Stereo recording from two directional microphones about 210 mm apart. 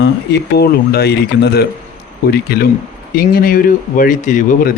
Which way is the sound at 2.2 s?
50° left (ahead or behind).